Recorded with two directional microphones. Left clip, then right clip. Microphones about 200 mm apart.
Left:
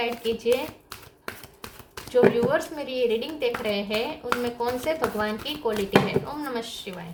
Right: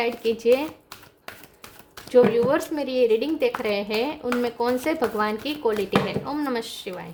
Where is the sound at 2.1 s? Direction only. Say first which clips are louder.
Right 2 dB; 50° right (ahead or behind).